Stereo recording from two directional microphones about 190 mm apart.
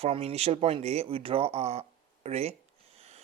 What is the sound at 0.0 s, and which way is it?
Speech, 30° right (ahead or behind).